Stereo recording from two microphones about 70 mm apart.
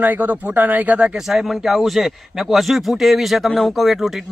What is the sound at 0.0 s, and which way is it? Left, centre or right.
Speech, right.